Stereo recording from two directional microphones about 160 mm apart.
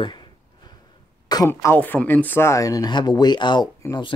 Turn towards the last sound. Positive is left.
turn(degrees=30)  # may be behind; listen again after turning